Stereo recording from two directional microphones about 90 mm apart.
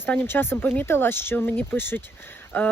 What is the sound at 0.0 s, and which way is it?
Speech, 25° left (ahead or behind).